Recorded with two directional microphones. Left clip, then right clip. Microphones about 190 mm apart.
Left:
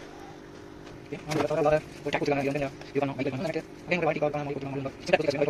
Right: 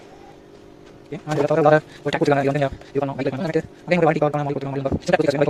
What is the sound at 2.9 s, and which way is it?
Speech, 40° right (ahead or behind).